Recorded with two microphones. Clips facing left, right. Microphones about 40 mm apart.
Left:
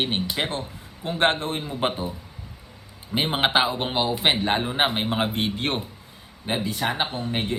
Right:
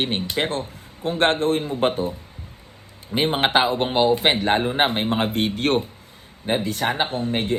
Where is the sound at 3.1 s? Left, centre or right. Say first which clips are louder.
Right 3 dB; right.